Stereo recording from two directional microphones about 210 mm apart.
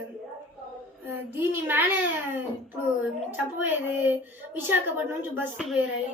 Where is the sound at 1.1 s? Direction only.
10° right (ahead or behind).